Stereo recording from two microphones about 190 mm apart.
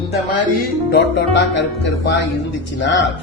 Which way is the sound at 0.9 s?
60° left (ahead or behind).